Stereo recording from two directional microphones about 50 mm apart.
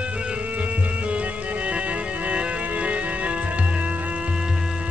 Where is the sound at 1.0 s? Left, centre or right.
Right.